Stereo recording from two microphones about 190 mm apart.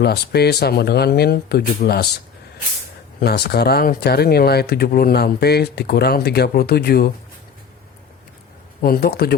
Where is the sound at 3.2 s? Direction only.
55° left (ahead or behind).